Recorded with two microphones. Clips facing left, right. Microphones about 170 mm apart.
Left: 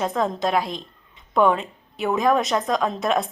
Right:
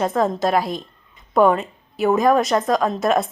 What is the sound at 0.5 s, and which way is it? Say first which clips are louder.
Speech: right 3 dB; 45° right (ahead or behind).